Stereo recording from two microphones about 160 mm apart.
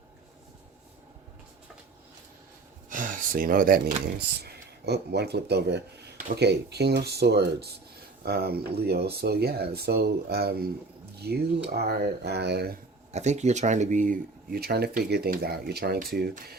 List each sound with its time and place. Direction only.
2.9 s a sound: 55° right (ahead or behind)
4.4 s speech: 90° right
8.2 s speech: 75° right (ahead or behind)
13.1 s speech: 45° right (ahead or behind); by 16.3 s 75° right (ahead or behind)